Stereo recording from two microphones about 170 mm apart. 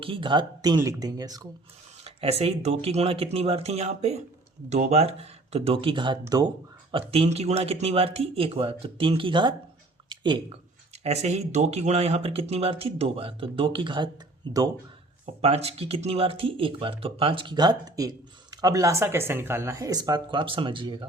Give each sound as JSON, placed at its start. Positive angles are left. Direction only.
{"t": 0.0, "sound": "speech", "side_deg": -30}
{"t": 2.0, "sound": "speech", "side_deg": -35}
{"t": 7.1, "sound": "speech", "side_deg": -35}
{"t": 10.1, "sound": "a sound", "side_deg": -30}
{"t": 11.0, "sound": "speech", "side_deg": -40}
{"t": 15.4, "sound": "speech", "side_deg": -35}